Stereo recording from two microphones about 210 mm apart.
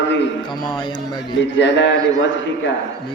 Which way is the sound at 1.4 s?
55° left (ahead or behind).